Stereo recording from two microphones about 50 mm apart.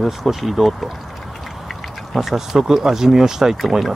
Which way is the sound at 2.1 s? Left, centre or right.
Centre.